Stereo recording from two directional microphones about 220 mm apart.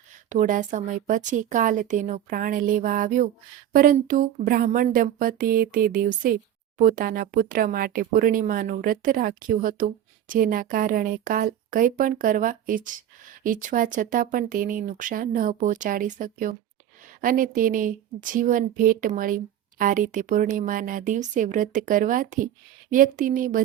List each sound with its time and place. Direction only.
0.3 s speech: 35° right (ahead or behind)